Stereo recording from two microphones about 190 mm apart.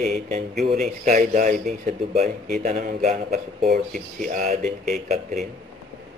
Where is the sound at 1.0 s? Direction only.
45° right (ahead or behind).